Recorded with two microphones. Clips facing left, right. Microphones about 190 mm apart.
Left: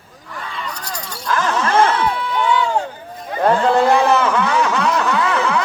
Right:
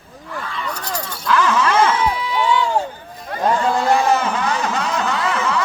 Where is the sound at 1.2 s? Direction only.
45° left (ahead or behind).